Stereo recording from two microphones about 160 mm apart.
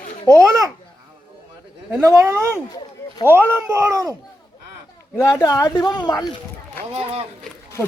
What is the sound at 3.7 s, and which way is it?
Speech, 15° right (ahead or behind).